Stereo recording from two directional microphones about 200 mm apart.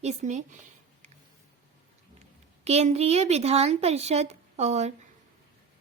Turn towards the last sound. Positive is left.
turn(degrees=-35)  # may be behind; listen again after turning